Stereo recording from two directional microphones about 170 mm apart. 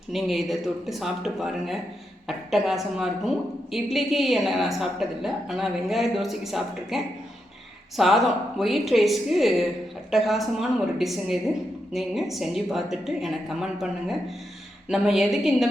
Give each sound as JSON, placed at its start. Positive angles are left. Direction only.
{"t": 0.1, "sound": "a woman's voice", "side_deg": 0}
{"t": 14.8, "sound": "a woman's voice", "side_deg": 0}